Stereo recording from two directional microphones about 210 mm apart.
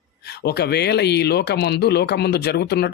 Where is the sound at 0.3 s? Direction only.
50° left (ahead or behind).